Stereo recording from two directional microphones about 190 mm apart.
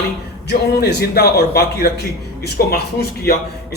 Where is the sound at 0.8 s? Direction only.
55° left (ahead or behind).